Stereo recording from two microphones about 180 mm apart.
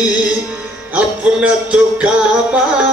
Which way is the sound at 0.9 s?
5° right (ahead or behind).